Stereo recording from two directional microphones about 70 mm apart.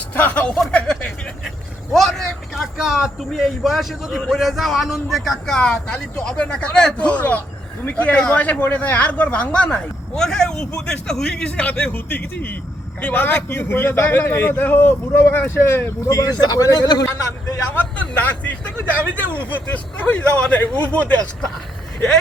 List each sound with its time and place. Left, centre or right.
0.1 s speech: left
0.7 s a sound: centre
1.5 s vehicle: centre
2.7 s a man's voice: centre; by 16.1 s left
16.4 s a man's voice: left
17.7 s speech: left